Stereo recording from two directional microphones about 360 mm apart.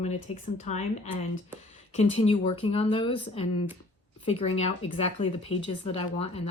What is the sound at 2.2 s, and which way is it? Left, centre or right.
Speech, centre.